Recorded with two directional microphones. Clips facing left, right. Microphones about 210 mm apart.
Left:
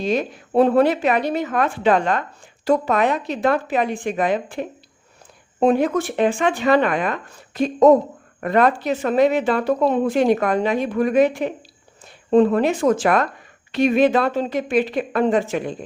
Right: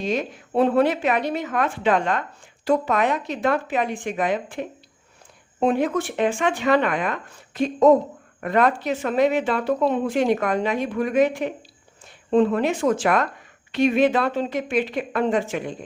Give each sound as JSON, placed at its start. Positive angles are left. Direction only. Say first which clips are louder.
{"t": 0.1, "sound": "speech", "louder": "left 5 dB", "side_deg": 40}